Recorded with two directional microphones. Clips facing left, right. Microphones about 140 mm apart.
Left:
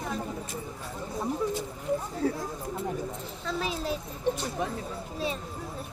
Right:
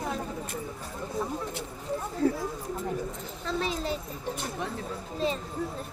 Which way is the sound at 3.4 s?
Centre (ahead or behind).